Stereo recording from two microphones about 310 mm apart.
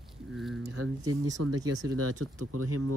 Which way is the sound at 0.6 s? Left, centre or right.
Right.